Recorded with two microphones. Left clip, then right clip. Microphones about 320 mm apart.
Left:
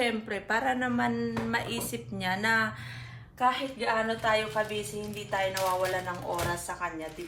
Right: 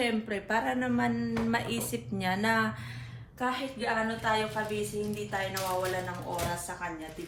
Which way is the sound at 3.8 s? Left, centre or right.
Left.